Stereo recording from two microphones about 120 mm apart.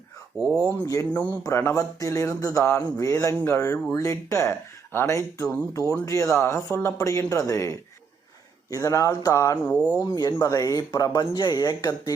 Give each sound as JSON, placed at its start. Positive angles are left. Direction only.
{"t": 0.6, "sound": "speech", "side_deg": 15}
{"t": 9.6, "sound": "speech", "side_deg": 10}
{"t": 10.0, "sound": "speech", "side_deg": 35}